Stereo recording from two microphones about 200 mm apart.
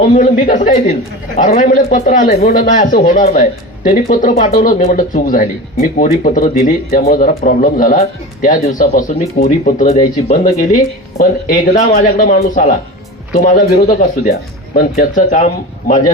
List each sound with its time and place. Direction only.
0.1 s speech: 40° left (ahead or behind)